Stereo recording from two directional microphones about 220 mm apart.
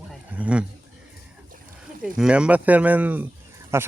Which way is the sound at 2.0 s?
5° right (ahead or behind).